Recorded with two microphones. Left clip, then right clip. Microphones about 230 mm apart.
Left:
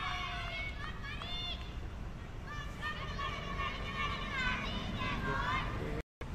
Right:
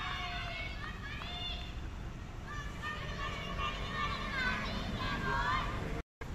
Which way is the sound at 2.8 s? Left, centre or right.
Left.